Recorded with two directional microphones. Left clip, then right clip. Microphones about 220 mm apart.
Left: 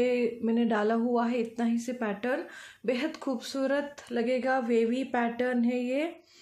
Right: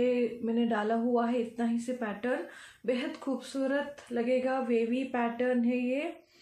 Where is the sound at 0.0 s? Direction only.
45° left (ahead or behind).